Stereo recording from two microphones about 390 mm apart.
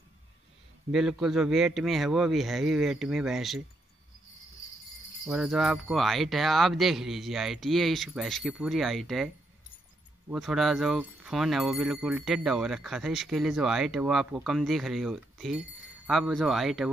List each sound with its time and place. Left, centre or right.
0.9 s speech: centre
5.2 s speech: centre
10.3 s speech: centre